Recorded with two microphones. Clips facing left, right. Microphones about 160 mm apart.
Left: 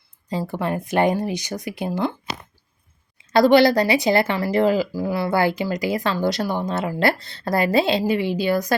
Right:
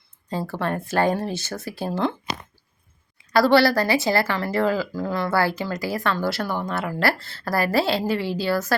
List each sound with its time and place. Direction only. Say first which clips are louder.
0.3 s speech: left 2 dB; 15° left (ahead or behind)
1.9 s speech: even; 5° left (ahead or behind)
3.3 s speech: left 3 dB; 20° left (ahead or behind)